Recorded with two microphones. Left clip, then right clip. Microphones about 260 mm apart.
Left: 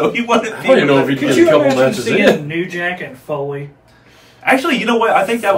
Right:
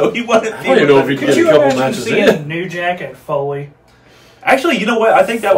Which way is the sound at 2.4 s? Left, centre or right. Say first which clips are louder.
Right 1 dB; centre.